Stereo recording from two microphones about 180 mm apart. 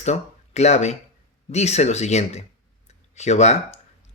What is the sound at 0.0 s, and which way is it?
Speech, 40° left (ahead or behind).